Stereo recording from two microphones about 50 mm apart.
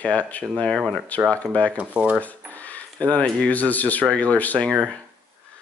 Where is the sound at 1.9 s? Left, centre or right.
Right.